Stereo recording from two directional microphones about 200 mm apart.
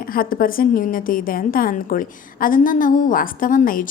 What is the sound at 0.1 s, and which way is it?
A woman's voice, 45° left (ahead or behind).